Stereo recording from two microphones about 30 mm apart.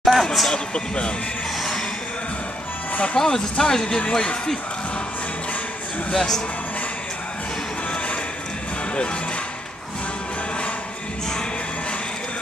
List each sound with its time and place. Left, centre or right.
0.0 s a sound: centre
0.7 s speech: left
3.2 s speech: left
6.1 s speech: centre